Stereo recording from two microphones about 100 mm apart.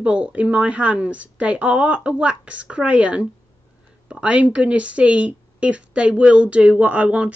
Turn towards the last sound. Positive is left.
turn(degrees=-15)  # may be behind; listen again after turning